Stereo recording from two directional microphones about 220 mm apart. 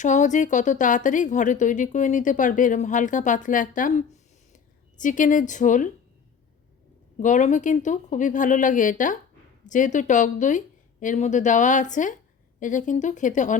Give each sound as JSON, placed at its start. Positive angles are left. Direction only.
{"t": 0.0, "sound": "speech", "side_deg": 35}
{"t": 7.2, "sound": "speech", "side_deg": 35}